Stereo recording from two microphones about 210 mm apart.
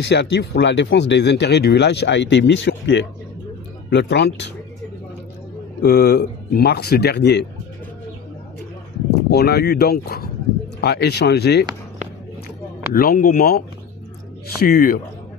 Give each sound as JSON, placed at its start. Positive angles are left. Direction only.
{"t": 0.0, "sound": "speech", "side_deg": 55}
{"t": 5.8, "sound": "speech", "side_deg": 50}
{"t": 9.3, "sound": "speech", "side_deg": 50}
{"t": 12.9, "sound": "speech", "side_deg": 45}